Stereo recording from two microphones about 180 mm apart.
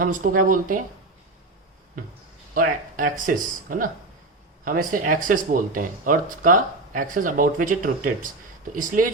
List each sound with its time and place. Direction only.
0.0 s speech: 50° right (ahead or behind)
2.6 s speech: 50° right (ahead or behind)